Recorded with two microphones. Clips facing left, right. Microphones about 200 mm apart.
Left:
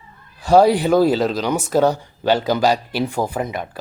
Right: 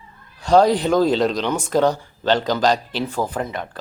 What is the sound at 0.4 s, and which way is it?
Speech, 10° left (ahead or behind).